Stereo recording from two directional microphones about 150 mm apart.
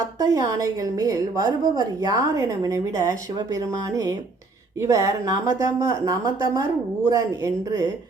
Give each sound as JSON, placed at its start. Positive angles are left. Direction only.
{"t": 0.0, "sound": "a woman's voice", "side_deg": -20}